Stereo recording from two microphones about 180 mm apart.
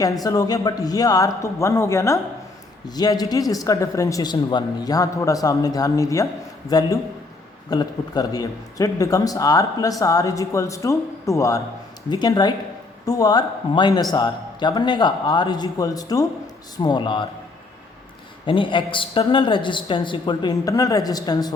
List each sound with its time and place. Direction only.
0.0 s speech: 20° left (ahead or behind)
18.4 s speech: 30° left (ahead or behind)